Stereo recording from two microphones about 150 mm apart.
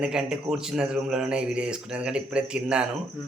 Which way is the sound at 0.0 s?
5° right (ahead or behind).